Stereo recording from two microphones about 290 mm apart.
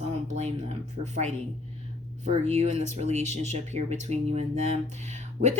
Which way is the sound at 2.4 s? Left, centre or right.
Right.